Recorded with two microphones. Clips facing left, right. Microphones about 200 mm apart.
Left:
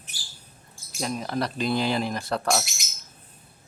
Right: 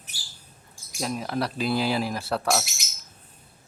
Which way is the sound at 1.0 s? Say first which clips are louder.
Even; 5° right (ahead or behind).